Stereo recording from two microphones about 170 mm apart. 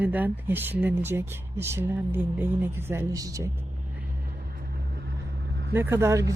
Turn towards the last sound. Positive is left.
turn(degrees=-15)  # may be behind; listen again after turning